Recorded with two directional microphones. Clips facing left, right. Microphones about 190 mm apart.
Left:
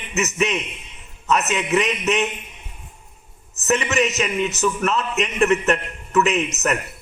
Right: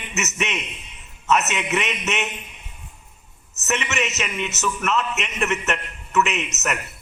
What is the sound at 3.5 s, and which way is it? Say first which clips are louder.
A man's voice: left 5 dB; 35° left (ahead or behind).